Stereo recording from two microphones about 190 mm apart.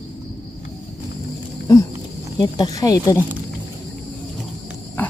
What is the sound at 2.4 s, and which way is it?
Speech, 20° left (ahead or behind).